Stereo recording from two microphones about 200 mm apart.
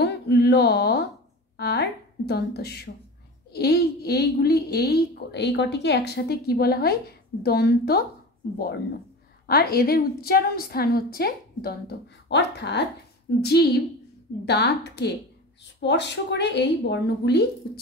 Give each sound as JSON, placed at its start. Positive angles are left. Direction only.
{"t": 0.0, "sound": "a sound", "side_deg": 55}
{"t": 1.6, "sound": "a woman's voice", "side_deg": 55}
{"t": 9.5, "sound": "a woman's voice", "side_deg": 50}